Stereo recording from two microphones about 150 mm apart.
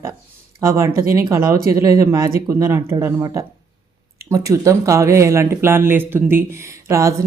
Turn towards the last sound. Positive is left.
turn(degrees=-20)  # may be behind; listen again after turning